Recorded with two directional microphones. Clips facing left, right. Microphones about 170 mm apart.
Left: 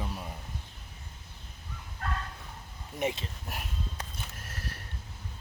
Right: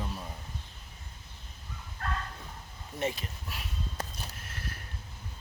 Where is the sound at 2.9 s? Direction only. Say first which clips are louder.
Left 1 dB; 15° left (ahead or behind).